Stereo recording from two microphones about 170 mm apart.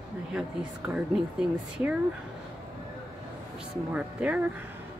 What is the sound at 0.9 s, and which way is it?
A woman's voice, 5° right (ahead or behind).